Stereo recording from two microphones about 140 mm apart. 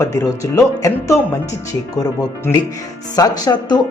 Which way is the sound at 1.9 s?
25° left (ahead or behind).